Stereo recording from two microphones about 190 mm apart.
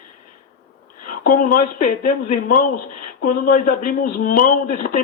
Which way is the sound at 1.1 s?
45° left (ahead or behind).